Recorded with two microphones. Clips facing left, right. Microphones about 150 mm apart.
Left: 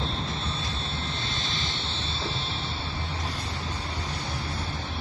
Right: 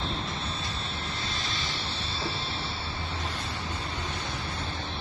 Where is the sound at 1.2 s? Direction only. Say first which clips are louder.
Left 1 dB; centre (ahead or behind).